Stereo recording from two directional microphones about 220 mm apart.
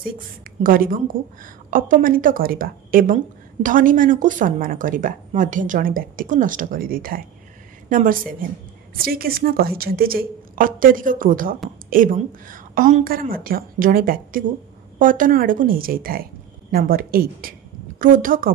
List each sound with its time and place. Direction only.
0.4 s a woman's voice: 40° right (ahead or behind)